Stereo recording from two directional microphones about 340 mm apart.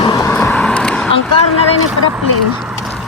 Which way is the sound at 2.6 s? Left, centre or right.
Centre.